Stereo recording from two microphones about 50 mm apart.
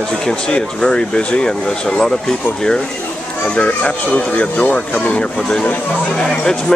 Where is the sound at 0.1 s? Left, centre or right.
Centre.